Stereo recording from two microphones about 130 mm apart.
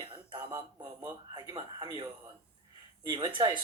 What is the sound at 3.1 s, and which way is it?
Speech, 40° right (ahead or behind).